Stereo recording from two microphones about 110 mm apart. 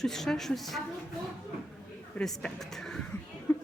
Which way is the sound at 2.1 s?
5° left (ahead or behind).